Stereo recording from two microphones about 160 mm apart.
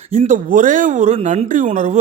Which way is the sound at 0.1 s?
40° right (ahead or behind).